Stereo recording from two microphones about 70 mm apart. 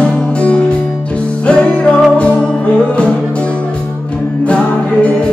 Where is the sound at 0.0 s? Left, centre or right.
Centre.